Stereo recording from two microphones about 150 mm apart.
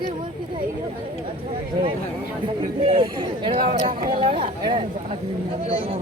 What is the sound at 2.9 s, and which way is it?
Speech, 35° right (ahead or behind).